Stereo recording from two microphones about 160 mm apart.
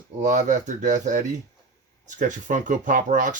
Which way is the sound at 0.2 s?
50° right (ahead or behind).